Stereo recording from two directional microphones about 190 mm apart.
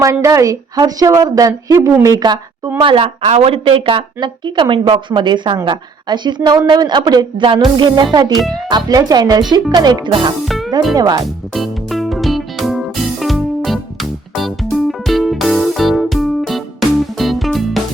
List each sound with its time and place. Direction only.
0.0 s a woman's voice: 15° right (ahead or behind)
10.4 s music: centre (ahead or behind)
10.9 s speech: 20° right (ahead or behind)
11.5 s music: centre (ahead or behind)